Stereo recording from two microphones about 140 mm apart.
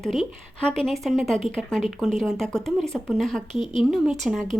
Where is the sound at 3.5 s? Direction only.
35° left (ahead or behind).